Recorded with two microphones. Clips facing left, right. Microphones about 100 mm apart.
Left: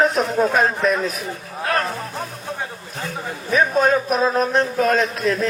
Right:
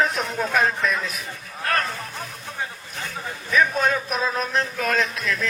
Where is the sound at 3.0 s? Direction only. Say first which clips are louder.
Left 5 dB; 40° left (ahead or behind).